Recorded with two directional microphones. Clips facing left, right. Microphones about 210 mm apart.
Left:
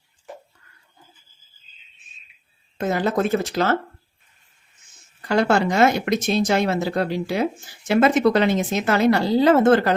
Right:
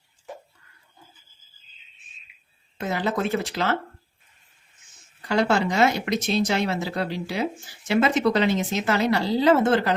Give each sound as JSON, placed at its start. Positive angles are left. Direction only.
{"t": 2.7, "sound": "speech", "side_deg": 45}
{"t": 5.3, "sound": "speech", "side_deg": 50}